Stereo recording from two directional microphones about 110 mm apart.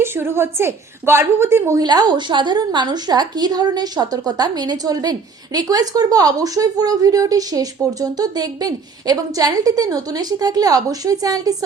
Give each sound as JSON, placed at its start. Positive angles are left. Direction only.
{"t": 0.0, "sound": "a woman's voice", "side_deg": -20}
{"t": 1.8, "sound": "speech", "side_deg": -40}